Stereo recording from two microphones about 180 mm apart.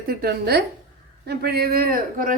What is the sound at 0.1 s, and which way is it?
A woman's voice, 60° right (ahead or behind).